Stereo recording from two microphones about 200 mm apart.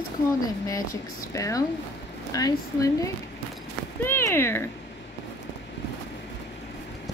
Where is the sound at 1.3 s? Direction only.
15° left (ahead or behind).